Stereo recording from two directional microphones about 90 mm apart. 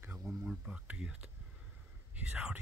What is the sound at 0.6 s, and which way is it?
Speech, 10° right (ahead or behind).